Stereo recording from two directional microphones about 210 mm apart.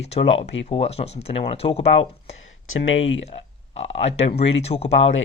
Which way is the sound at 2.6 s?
70° left (ahead or behind).